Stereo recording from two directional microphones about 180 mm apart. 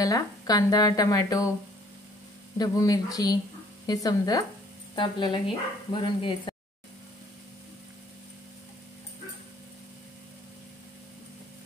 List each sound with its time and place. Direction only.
0.0 s speech: 20° left (ahead or behind)
2.5 s speech: 20° left (ahead or behind)